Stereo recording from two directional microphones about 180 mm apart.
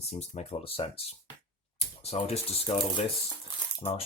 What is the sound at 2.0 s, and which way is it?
Speech, 35° left (ahead or behind).